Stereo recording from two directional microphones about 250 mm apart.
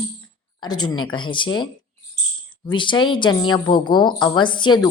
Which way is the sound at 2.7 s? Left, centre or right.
Centre.